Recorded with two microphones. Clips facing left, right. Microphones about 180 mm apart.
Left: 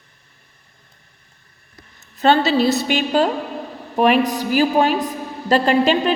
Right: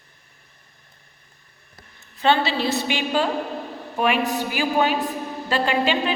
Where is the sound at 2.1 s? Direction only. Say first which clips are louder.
Left 5 dB; 40° left (ahead or behind).